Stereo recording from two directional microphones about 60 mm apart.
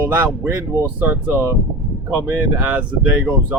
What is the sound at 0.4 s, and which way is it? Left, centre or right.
Speech, right.